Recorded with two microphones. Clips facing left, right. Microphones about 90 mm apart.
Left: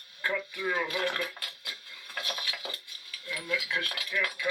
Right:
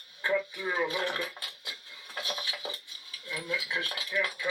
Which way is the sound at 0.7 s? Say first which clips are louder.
Even; 25° right (ahead or behind).